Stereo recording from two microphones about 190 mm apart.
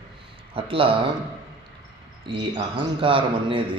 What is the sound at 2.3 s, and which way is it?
A man's voice, 25° right (ahead or behind).